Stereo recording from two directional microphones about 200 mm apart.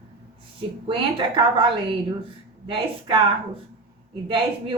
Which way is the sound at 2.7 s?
25° right (ahead or behind).